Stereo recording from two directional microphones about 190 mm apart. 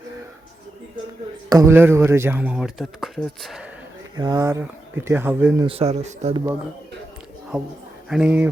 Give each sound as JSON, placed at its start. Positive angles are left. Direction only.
{"t": 1.5, "sound": "speech", "side_deg": -15}
{"t": 4.2, "sound": "speech", "side_deg": -20}
{"t": 5.6, "sound": "speech", "side_deg": -30}
{"t": 6.3, "sound": "speech", "side_deg": -15}
{"t": 7.5, "sound": "a woman's voice", "side_deg": -5}